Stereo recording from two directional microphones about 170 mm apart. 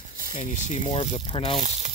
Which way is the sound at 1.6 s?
40° right (ahead or behind).